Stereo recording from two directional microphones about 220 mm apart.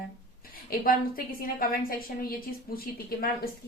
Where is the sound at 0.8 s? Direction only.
40° left (ahead or behind).